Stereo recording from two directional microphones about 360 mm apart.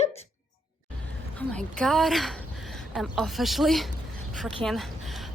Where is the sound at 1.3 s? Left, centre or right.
Centre.